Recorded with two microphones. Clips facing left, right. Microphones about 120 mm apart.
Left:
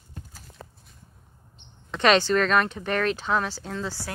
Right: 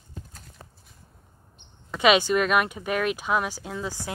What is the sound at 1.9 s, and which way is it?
Speech, 10° right (ahead or behind).